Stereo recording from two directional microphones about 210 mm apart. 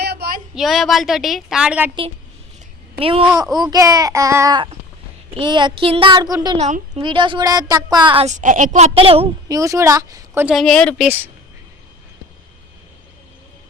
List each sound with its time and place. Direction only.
0.0 s a sound: 50° right (ahead or behind)
0.5 s a woman's voice: centre (ahead or behind)
3.0 s a woman's voice: 25° right (ahead or behind)
6.6 s a woman's voice: 35° right (ahead or behind)
7.0 s a woman's voice: 25° right (ahead or behind)
9.6 s a child's voice: 15° right (ahead or behind)
10.4 s a woman's voice: centre (ahead or behind)